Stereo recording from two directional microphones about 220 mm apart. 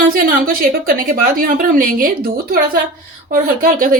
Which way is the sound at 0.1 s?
40° right (ahead or behind).